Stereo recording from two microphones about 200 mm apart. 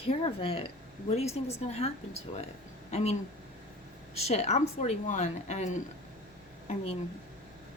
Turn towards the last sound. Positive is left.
turn(degrees=30)  # may be behind; listen again after turning